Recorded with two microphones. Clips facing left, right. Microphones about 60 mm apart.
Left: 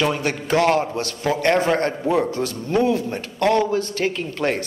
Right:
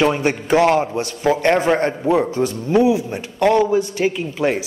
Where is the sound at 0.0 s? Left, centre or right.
Right.